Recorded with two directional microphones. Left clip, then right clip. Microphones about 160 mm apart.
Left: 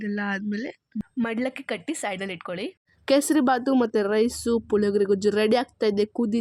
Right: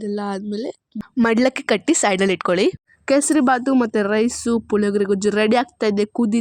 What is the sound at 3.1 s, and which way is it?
Speech, 25° right (ahead or behind).